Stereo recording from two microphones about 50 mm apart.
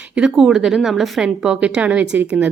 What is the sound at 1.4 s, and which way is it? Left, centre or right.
Speech, centre.